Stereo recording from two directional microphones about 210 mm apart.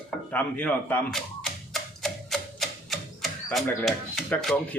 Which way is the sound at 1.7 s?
Centre (ahead or behind).